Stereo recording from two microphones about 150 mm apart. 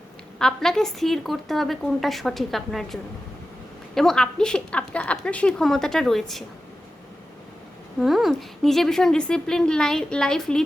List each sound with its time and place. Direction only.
0.3 s a woman's voice: 5° left (ahead or behind)
7.9 s a woman's voice: centre (ahead or behind)